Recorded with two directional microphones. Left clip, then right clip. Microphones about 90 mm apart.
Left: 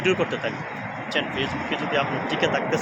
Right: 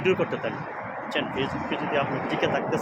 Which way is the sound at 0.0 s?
30° right (ahead or behind).